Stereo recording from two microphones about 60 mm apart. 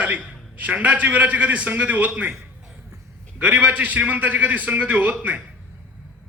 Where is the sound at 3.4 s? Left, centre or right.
Right.